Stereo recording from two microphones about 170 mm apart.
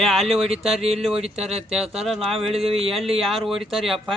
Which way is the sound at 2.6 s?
35° right (ahead or behind).